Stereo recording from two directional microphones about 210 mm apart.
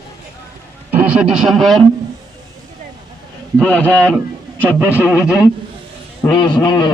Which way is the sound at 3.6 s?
5° left (ahead or behind).